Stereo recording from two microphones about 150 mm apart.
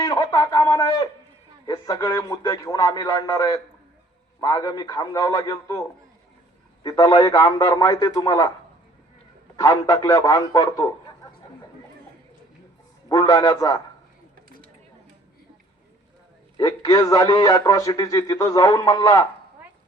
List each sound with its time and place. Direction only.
0.0 s a sound: 20° left (ahead or behind)
1.6 s speech: 25° left (ahead or behind)
6.8 s speech: 25° left (ahead or behind)
9.6 s speech: 25° left (ahead or behind)
13.1 s speech: 25° left (ahead or behind)
16.6 s speech: 25° left (ahead or behind)